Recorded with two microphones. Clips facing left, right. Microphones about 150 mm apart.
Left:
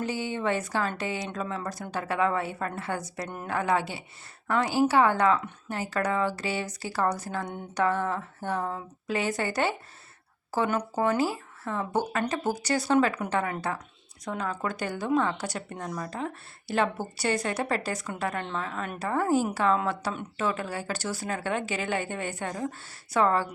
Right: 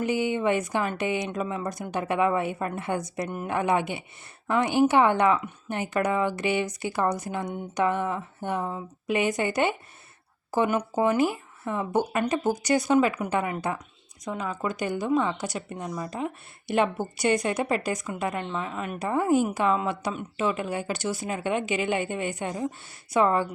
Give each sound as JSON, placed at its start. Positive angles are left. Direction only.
{"t": 0.0, "sound": "speech", "side_deg": -15}